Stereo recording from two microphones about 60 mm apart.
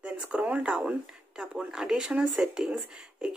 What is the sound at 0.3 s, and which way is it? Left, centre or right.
Speech, right.